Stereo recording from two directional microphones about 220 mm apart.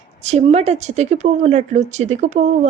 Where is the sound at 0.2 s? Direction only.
30° right (ahead or behind).